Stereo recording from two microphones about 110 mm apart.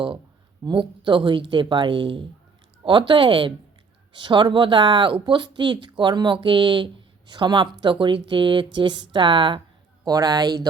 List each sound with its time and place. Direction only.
0.6 s speech: 45° right (ahead or behind)
10.0 s speech: 35° right (ahead or behind)